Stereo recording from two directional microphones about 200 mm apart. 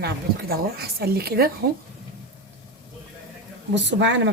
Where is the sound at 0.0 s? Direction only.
50° right (ahead or behind).